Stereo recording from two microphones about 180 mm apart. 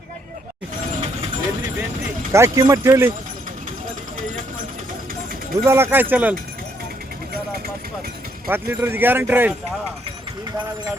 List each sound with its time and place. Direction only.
2.3 s speech: 15° right (ahead or behind)
5.6 s speech: 15° right (ahead or behind)
8.4 s speech: 10° right (ahead or behind)